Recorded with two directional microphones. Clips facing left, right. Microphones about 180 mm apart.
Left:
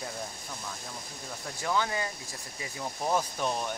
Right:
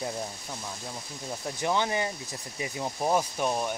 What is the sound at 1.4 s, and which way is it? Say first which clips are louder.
Speech: right 2 dB; 25° right (ahead or behind).